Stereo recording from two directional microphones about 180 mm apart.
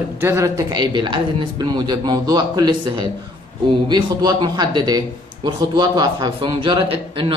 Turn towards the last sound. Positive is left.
turn(degrees=-30)  # may be behind; listen again after turning